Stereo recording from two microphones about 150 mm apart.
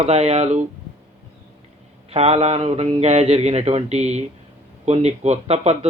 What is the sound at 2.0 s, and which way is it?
A man's voice, 45° right (ahead or behind).